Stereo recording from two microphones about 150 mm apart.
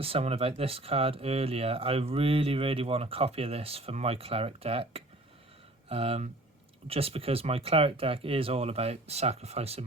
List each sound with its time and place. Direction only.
0.0 s speech: 40° right (ahead or behind)